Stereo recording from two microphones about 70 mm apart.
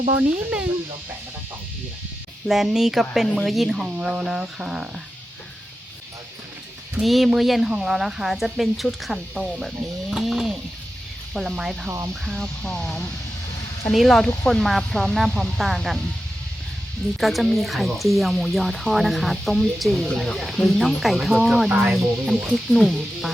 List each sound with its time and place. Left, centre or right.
0.2 s speech: right
2.5 s speech: centre
7.0 s speech: centre
13.9 s speech: centre
17.2 s speech: centre